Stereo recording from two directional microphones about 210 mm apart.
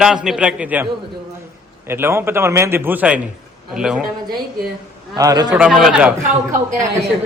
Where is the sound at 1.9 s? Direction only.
10° right (ahead or behind).